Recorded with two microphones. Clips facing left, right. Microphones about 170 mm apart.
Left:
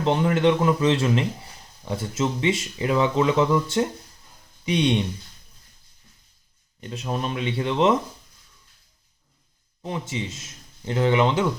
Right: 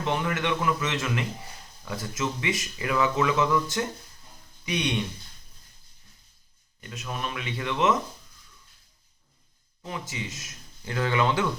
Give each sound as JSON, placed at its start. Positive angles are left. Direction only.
{"t": 0.0, "sound": "a man's voice", "side_deg": 30}
{"t": 6.9, "sound": "a man's voice", "side_deg": 30}
{"t": 9.8, "sound": "speech", "side_deg": 30}